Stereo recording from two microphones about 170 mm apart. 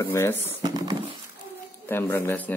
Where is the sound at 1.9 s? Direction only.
15° left (ahead or behind).